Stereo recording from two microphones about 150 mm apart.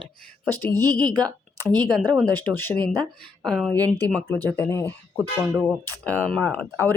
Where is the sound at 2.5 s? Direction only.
15° left (ahead or behind).